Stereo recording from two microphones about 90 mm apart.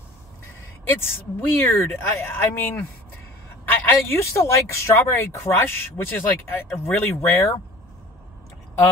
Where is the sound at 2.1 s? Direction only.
25° left (ahead or behind).